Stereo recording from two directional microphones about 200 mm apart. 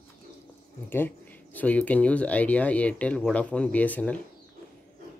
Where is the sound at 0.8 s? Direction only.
10° left (ahead or behind).